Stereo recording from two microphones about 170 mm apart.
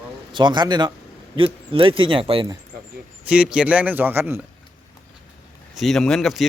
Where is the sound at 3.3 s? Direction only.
5° right (ahead or behind).